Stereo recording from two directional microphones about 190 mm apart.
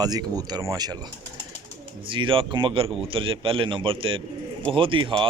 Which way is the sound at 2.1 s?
25° right (ahead or behind).